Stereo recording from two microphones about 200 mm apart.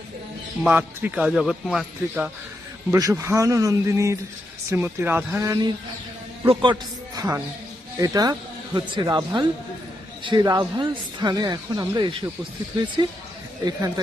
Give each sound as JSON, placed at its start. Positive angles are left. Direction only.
{"t": 0.6, "sound": "speech", "side_deg": -10}
{"t": 2.9, "sound": "a man's voice", "side_deg": -15}
{"t": 13.7, "sound": "speech", "side_deg": -20}